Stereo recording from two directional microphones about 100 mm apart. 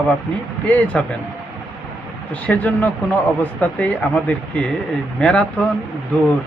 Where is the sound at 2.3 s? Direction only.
15° left (ahead or behind).